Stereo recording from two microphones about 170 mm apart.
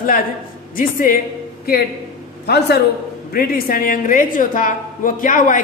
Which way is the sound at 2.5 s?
75° left (ahead or behind).